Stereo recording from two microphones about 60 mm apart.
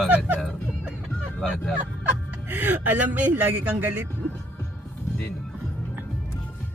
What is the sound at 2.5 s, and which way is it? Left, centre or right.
A woman's voice, right.